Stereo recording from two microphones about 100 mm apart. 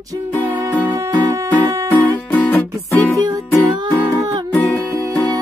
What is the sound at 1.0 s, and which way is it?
Music, 30° right (ahead or behind).